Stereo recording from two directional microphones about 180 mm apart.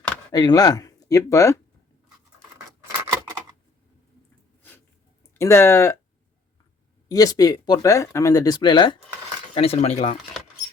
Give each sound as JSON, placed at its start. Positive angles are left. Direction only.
{"t": 0.3, "sound": "speech", "side_deg": 20}
{"t": 5.3, "sound": "speech", "side_deg": 15}
{"t": 7.1, "sound": "speech", "side_deg": 20}
{"t": 9.6, "sound": "speech", "side_deg": 35}